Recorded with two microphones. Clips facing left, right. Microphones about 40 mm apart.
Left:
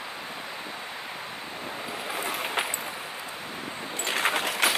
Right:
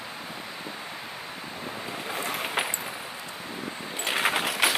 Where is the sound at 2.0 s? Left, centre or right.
Centre.